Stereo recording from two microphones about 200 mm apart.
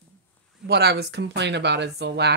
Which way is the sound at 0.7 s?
55° right (ahead or behind).